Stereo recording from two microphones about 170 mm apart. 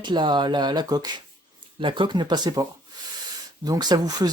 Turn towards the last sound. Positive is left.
turn(degrees=-25)  # may be behind; listen again after turning